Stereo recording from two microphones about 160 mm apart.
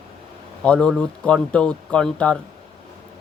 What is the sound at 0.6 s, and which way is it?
Speech, 5° left (ahead or behind).